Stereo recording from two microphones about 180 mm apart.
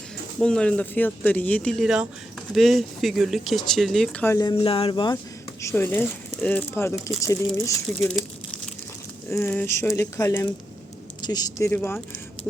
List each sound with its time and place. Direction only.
0.3 s speech: 5° left (ahead or behind)
4.4 s speech: 25° left (ahead or behind)
5.6 s speech: 10° left (ahead or behind)
9.3 s speech: 15° left (ahead or behind)